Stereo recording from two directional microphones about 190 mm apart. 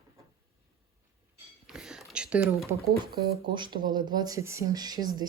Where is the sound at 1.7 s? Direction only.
Centre (ahead or behind).